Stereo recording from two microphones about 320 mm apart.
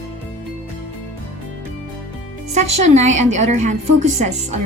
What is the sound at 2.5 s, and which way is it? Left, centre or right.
A woman's voice, right.